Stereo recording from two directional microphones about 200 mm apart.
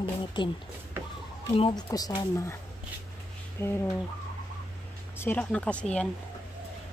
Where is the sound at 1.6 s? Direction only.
25° left (ahead or behind).